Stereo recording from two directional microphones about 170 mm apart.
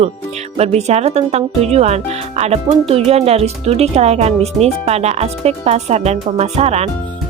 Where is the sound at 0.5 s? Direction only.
40° right (ahead or behind).